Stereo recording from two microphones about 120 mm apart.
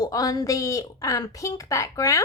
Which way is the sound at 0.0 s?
30° left (ahead or behind).